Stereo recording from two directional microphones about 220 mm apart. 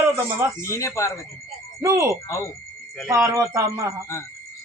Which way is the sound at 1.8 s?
15° right (ahead or behind).